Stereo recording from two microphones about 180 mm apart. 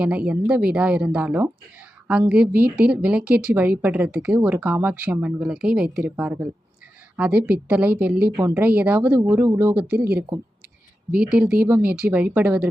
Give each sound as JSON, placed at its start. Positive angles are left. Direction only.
{"t": 0.0, "sound": "a woman's voice", "side_deg": -5}
{"t": 11.1, "sound": "a woman's voice", "side_deg": -5}